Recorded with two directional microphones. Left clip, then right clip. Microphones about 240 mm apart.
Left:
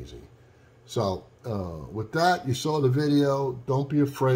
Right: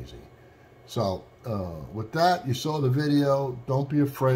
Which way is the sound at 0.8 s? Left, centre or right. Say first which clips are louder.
Even; centre.